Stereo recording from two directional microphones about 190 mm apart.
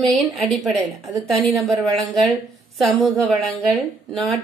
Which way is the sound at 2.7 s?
Centre (ahead or behind).